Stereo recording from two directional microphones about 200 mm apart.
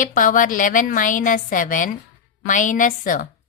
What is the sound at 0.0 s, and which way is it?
A woman's voice, 40° left (ahead or behind).